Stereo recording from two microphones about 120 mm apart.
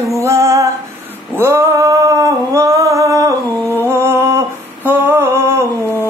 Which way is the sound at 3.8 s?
20° right (ahead or behind).